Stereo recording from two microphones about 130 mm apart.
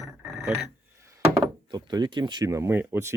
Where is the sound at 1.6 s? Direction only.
35° right (ahead or behind); by 3.1 s 15° right (ahead or behind).